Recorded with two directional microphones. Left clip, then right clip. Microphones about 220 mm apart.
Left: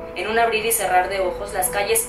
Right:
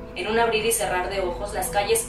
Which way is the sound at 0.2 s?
20° left (ahead or behind).